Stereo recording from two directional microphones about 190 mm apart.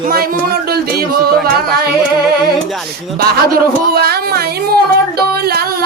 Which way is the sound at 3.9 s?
55° right (ahead or behind).